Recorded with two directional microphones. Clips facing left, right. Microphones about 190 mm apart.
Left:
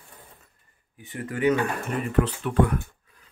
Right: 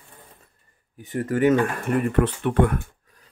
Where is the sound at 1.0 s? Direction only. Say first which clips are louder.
Right 7 dB; 40° right (ahead or behind).